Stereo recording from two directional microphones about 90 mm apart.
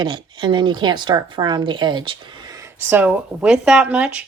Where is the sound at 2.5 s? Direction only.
30° right (ahead or behind); by 4.2 s 15° right (ahead or behind).